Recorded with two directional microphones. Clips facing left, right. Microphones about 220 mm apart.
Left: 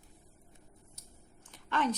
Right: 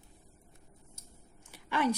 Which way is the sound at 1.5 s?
10° right (ahead or behind).